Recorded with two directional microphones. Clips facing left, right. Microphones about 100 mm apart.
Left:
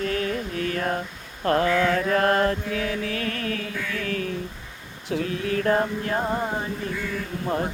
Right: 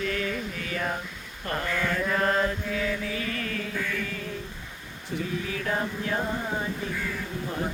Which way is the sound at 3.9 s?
75° left (ahead or behind).